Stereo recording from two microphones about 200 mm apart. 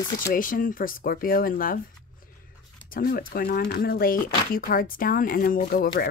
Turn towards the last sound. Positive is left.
turn(degrees=45)  # may be behind; listen again after turning